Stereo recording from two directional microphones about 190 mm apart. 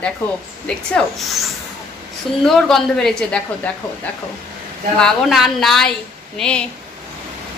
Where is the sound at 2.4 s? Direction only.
Centre (ahead or behind).